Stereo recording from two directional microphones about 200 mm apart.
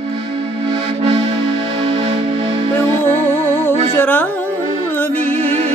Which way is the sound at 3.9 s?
10° left (ahead or behind).